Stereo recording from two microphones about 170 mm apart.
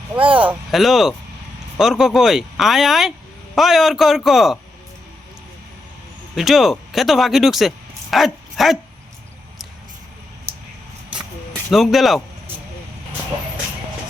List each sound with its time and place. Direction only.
0.2 s speech: 30° right (ahead or behind)
0.4 s speech: centre (ahead or behind)
6.3 s speech: centre (ahead or behind)
11.7 s speech: centre (ahead or behind)